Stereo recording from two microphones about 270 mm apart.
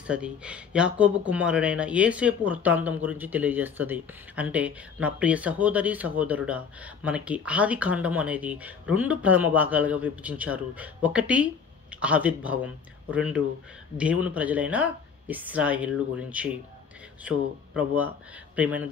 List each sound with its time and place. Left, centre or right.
0.0 s speech: centre